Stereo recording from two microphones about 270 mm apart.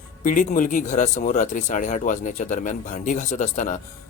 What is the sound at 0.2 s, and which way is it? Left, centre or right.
Speech, left.